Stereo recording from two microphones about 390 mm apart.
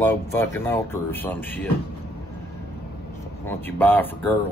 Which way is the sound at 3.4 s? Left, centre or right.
Centre.